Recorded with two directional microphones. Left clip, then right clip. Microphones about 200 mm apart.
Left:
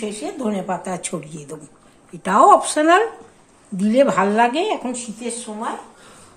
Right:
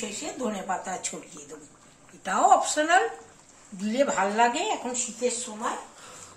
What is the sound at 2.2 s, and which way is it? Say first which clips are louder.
Speech: left 8 dB; 55° left (ahead or behind).